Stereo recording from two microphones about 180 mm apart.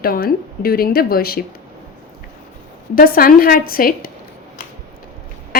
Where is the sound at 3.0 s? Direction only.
55° left (ahead or behind).